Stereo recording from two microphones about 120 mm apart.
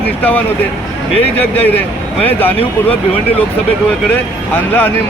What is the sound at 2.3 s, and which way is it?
Speech, 15° left (ahead or behind).